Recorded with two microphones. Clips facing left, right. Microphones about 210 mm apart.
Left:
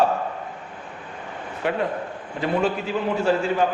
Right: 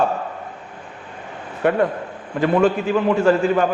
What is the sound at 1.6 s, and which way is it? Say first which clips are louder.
Speech: right 6 dB; 50° right (ahead or behind).